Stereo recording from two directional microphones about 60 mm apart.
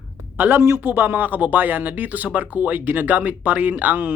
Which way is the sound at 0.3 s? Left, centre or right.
Right.